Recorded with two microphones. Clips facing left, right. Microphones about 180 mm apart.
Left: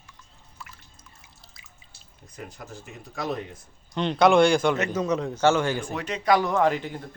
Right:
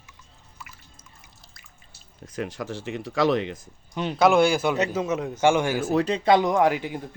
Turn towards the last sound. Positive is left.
turn(degrees=-10)  # may be behind; listen again after turning